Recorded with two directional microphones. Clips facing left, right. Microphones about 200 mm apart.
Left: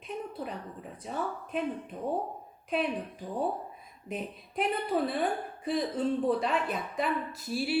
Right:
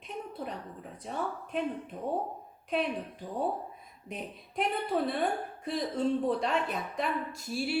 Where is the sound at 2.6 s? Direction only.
Centre (ahead or behind).